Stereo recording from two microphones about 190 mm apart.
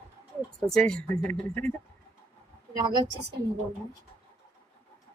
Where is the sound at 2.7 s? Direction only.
25° right (ahead or behind).